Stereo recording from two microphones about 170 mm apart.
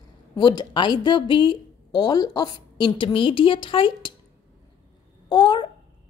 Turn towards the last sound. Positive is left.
turn(degrees=25)  # may be behind; listen again after turning